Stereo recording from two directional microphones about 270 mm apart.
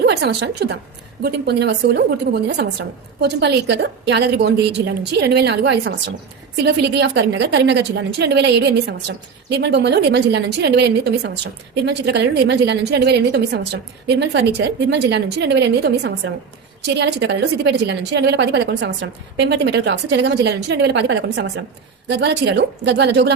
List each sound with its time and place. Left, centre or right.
0.0 s a woman's voice: right